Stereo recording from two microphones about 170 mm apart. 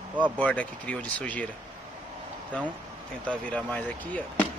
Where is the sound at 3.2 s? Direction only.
5° left (ahead or behind).